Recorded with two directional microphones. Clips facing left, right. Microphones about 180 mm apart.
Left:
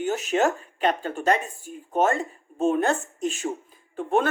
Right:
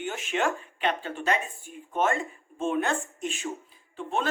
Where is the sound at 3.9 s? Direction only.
55° left (ahead or behind).